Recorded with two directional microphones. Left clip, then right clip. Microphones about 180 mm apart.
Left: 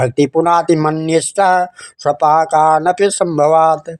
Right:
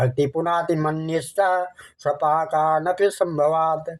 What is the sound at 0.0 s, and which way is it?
Speech, 30° left (ahead or behind).